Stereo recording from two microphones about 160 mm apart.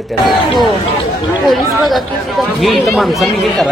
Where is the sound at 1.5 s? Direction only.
Centre (ahead or behind).